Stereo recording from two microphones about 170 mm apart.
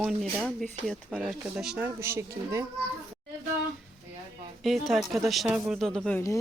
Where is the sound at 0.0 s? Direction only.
5° right (ahead or behind).